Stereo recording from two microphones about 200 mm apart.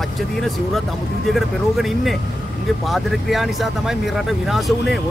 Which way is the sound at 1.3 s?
Centre (ahead or behind).